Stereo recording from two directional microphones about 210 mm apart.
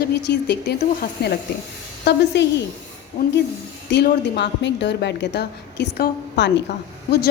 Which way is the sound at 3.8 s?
55° left (ahead or behind).